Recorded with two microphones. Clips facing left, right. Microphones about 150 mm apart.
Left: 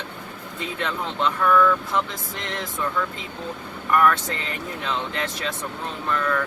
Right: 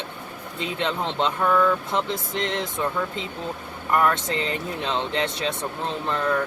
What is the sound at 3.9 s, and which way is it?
Speech, 30° right (ahead or behind).